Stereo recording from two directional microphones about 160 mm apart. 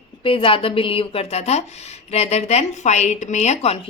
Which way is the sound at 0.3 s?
35° left (ahead or behind).